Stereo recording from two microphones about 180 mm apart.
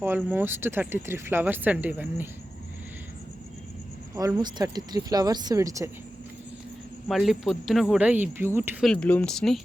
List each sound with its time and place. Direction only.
0.2 s speech: 10° right (ahead or behind)
4.1 s speech: 20° right (ahead or behind)
7.1 s speech: centre (ahead or behind)
8.8 s speech: 5° left (ahead or behind)